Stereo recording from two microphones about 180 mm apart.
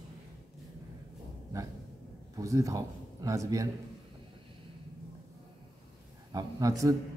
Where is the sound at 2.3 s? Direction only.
15° right (ahead or behind).